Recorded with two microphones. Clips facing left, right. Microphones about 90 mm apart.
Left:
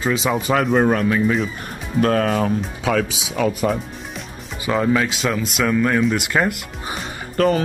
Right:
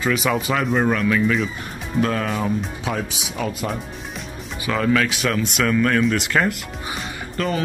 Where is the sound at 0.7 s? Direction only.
35° left (ahead or behind).